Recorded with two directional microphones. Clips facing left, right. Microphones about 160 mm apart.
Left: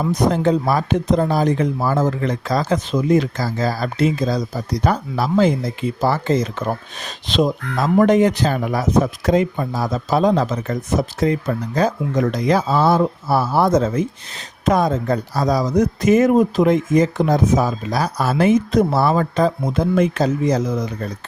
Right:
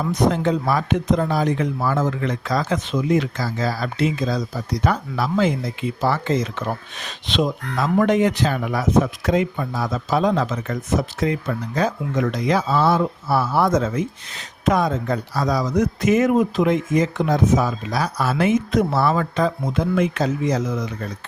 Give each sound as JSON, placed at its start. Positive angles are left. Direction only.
{"t": 0.1, "sound": "speech", "side_deg": 40}